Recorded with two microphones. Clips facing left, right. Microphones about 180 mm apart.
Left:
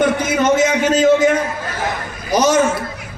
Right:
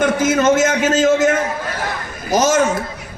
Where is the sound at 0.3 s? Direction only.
45° right (ahead or behind).